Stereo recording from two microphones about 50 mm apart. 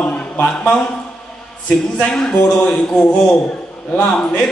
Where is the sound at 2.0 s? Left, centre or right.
Centre.